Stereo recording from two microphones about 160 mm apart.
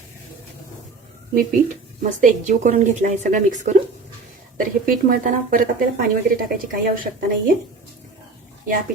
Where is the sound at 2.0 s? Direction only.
55° right (ahead or behind).